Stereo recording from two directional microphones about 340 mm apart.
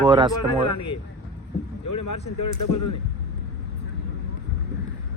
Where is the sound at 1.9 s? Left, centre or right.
Left.